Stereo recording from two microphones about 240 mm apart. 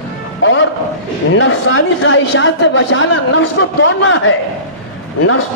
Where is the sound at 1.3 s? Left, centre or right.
Left.